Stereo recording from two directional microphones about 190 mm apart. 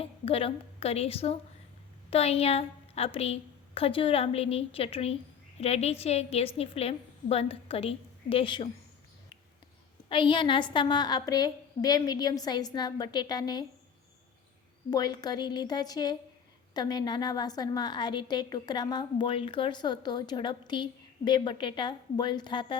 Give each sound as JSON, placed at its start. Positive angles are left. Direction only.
{"t": 0.0, "sound": "a woman's voice", "side_deg": 30}
{"t": 10.1, "sound": "a woman's voice", "side_deg": 25}
{"t": 14.8, "sound": "a woman's voice", "side_deg": 20}